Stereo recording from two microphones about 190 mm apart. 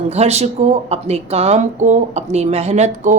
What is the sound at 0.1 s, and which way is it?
A woman's voice, 35° right (ahead or behind).